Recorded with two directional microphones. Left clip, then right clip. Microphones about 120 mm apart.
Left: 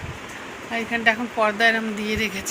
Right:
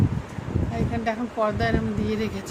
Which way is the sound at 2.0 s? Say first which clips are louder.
Left 3 dB; 40° right (ahead or behind).